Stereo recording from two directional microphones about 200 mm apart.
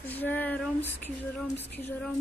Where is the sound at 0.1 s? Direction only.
10° left (ahead or behind).